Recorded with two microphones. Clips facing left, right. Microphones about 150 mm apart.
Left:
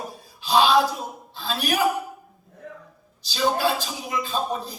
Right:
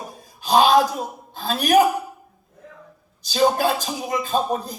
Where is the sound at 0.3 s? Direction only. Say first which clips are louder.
Right 3 dB; 45° right (ahead or behind).